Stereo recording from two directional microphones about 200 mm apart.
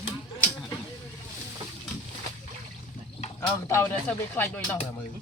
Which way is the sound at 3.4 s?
10° left (ahead or behind).